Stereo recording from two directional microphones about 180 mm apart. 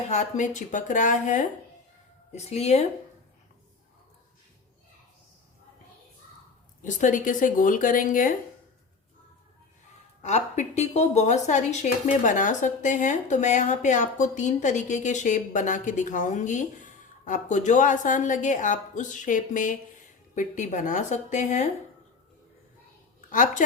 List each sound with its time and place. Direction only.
0.1 s speech: 40° left (ahead or behind)
6.8 s speech: 45° left (ahead or behind)
10.2 s speech: 40° left (ahead or behind)
23.3 s speech: 45° left (ahead or behind)